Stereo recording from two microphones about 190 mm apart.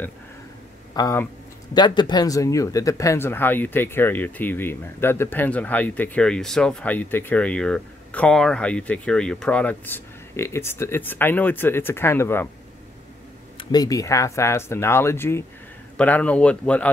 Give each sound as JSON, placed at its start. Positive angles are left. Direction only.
{"t": 0.9, "sound": "speech", "side_deg": 15}
{"t": 13.6, "sound": "speech", "side_deg": 20}